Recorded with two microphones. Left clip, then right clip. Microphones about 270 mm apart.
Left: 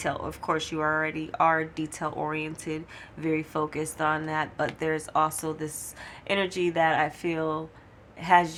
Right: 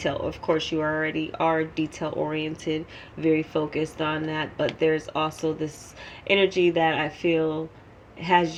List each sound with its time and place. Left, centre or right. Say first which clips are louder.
0.0 s speech: right 3 dB; left